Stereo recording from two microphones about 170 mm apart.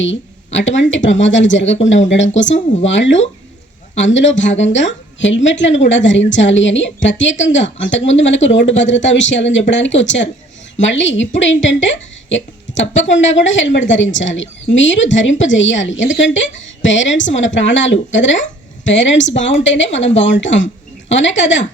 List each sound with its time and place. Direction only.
0.0 s a woman's voice: 90° left